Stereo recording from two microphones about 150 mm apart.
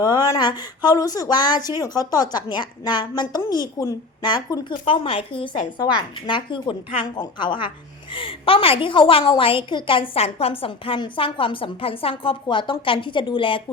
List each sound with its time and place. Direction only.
0.0 s a woman's voice: 25° left (ahead or behind)